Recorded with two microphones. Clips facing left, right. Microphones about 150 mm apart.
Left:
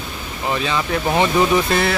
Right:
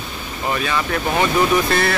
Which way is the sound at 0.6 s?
20° left (ahead or behind).